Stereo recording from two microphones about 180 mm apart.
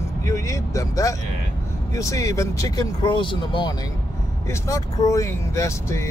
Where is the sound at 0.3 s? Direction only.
15° left (ahead or behind).